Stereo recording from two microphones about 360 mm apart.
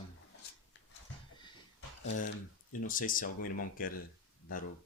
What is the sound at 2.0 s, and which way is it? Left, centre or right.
Speech, left.